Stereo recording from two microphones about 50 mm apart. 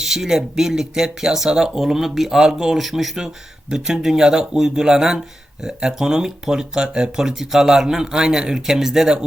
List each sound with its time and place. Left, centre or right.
0.0 s speech: centre